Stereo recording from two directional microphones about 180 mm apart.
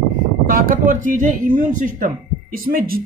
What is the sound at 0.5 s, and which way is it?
A man's voice, 50° right (ahead or behind).